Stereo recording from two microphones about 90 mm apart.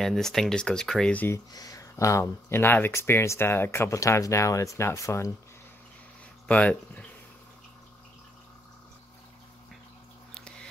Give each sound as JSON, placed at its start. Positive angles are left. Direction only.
{"t": 0.0, "sound": "speech", "side_deg": 5}
{"t": 1.5, "sound": "speech", "side_deg": 45}
{"t": 6.4, "sound": "speech", "side_deg": 15}
{"t": 10.3, "sound": "a sound", "side_deg": 10}